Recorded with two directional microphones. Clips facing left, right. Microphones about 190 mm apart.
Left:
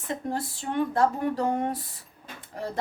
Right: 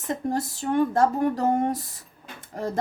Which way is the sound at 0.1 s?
45° right (ahead or behind).